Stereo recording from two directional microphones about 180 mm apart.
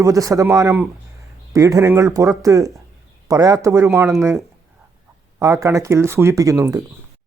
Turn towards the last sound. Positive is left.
turn(degrees=-15)  # may be behind; listen again after turning